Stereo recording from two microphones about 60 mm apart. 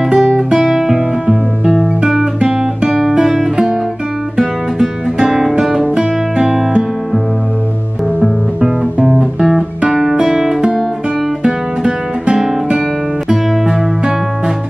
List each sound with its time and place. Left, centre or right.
0.1 s guitar: centre
2.9 s music: centre
8.2 s music: centre
9.2 s guitar: centre
11.4 s music: centre